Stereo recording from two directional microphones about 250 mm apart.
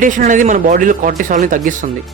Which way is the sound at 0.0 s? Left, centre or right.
Right.